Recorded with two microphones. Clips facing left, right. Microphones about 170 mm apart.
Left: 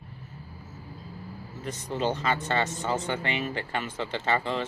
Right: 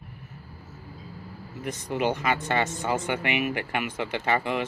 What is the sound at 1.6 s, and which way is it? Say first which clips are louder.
Speech: right 2 dB; 15° right (ahead or behind).